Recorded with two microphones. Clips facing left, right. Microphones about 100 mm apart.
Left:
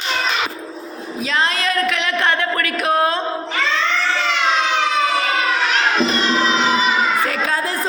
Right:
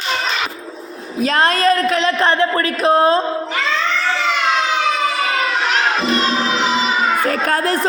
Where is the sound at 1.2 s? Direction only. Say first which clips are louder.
Right 6 dB; 45° right (ahead or behind); by 3.2 s 30° right (ahead or behind).